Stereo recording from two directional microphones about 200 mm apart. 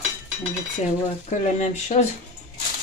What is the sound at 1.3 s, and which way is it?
Speech, 35° left (ahead or behind).